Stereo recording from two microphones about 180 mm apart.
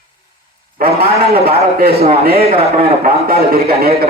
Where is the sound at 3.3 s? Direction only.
60° right (ahead or behind).